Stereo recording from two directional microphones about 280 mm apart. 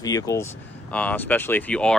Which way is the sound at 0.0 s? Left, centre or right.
Centre.